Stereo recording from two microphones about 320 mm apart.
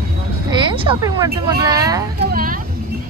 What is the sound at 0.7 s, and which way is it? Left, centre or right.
Speech, centre.